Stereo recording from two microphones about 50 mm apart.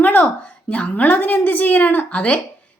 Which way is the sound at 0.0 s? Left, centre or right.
Left.